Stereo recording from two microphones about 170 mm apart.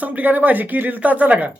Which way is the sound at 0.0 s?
10° right (ahead or behind).